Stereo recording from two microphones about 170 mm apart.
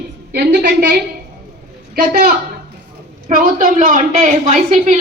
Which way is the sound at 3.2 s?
55° right (ahead or behind).